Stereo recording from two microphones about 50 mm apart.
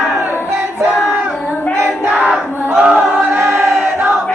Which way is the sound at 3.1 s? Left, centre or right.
Right.